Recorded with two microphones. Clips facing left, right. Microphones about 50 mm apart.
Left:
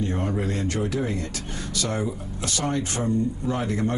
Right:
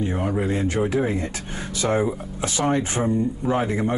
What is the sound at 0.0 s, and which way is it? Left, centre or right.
Speech, centre.